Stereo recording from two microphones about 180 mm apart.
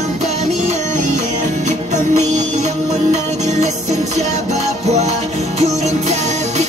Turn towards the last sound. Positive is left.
turn(degrees=-40)  # may be behind; listen again after turning